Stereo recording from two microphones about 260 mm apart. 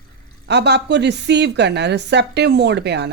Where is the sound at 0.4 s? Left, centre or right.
Right.